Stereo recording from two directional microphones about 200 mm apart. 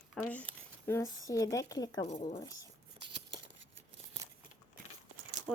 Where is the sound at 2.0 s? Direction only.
35° left (ahead or behind).